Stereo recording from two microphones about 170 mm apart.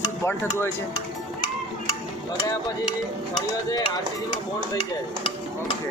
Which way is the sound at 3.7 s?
20° left (ahead or behind).